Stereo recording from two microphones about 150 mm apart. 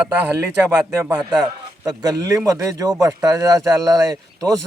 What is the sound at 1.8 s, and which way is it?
Speech, 25° right (ahead or behind).